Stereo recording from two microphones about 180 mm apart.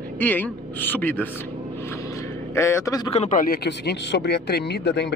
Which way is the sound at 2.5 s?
15° left (ahead or behind).